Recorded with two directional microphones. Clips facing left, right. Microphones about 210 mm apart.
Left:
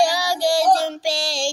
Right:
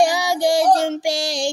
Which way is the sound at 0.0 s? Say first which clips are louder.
Right 2 dB; 20° right (ahead or behind).